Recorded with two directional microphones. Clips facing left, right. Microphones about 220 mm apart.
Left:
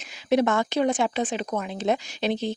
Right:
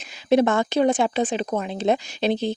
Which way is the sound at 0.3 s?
30° right (ahead or behind).